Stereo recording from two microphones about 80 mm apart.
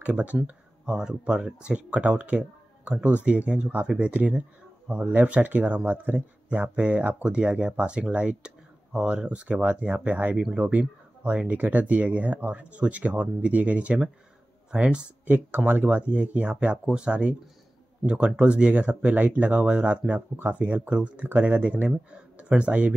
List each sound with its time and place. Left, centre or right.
0.0 s speech: centre